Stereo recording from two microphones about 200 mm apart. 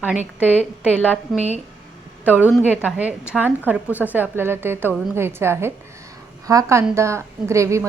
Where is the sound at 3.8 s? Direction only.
10° left (ahead or behind).